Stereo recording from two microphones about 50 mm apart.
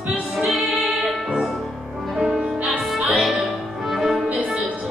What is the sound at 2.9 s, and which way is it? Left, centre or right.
Music, centre.